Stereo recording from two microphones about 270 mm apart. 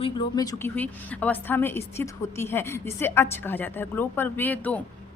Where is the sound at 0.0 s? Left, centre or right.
Centre.